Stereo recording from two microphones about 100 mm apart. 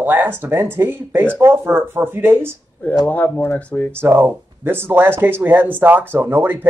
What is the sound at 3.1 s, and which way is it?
Speech, 20° left (ahead or behind).